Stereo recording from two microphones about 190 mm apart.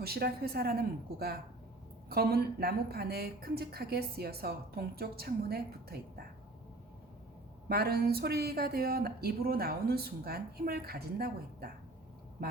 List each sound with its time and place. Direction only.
0.0 s a woman's voice: 55° right (ahead or behind)
7.7 s speech: 55° right (ahead or behind)